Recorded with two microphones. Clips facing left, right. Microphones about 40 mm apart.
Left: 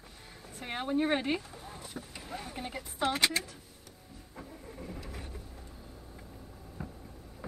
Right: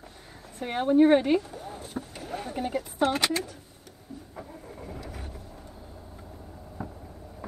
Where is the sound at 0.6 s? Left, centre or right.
Centre.